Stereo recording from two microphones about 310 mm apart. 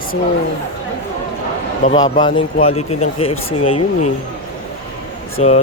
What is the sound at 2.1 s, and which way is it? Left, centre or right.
Speech, left.